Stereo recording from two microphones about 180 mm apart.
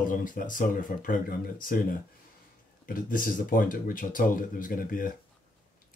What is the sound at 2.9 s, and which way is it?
Speech, 50° left (ahead or behind).